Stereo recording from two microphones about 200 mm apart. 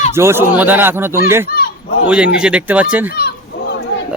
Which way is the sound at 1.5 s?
50° left (ahead or behind).